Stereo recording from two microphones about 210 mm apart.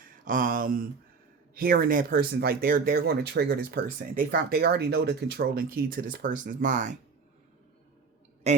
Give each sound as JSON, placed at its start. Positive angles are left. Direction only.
{"t": 0.3, "sound": "speech", "side_deg": -40}
{"t": 8.4, "sound": "speech", "side_deg": -30}